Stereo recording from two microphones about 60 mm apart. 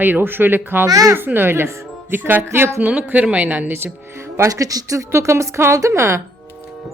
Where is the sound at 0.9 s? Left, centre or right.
Right.